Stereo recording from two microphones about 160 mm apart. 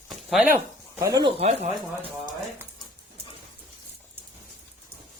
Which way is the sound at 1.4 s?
40° right (ahead or behind).